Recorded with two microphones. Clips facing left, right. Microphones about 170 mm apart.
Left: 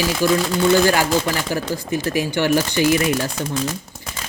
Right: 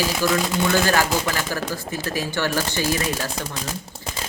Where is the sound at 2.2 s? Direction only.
15° left (ahead or behind).